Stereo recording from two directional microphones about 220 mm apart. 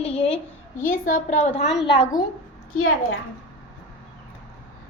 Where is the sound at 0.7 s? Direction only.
40° left (ahead or behind).